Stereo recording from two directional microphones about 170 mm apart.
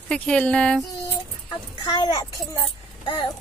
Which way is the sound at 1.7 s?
25° left (ahead or behind).